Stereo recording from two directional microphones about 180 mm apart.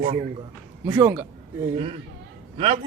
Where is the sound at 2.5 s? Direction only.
30° right (ahead or behind).